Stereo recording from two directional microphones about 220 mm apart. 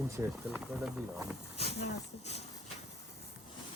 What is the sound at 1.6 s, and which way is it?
Speech, 30° left (ahead or behind).